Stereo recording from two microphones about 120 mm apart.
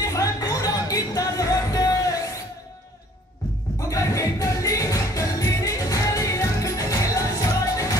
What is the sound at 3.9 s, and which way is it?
Music, 25° left (ahead or behind).